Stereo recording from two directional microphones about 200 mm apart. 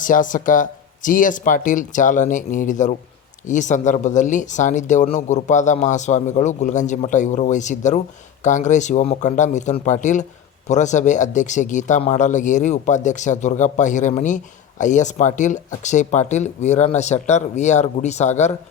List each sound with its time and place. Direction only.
0.0 s speech: 40° left (ahead or behind)